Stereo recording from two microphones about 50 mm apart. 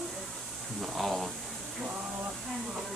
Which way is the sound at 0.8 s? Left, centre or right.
Centre.